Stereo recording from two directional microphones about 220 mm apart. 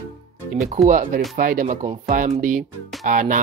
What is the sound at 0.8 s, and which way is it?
Speech, 35° right (ahead or behind).